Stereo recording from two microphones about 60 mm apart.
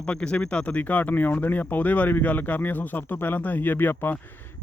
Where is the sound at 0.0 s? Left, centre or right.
Centre.